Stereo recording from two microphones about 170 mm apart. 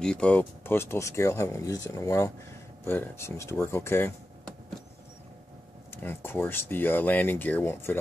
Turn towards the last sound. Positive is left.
turn(degrees=15)  # may be behind; listen again after turning